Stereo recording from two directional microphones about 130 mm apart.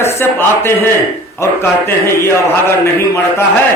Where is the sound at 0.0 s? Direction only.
20° left (ahead or behind).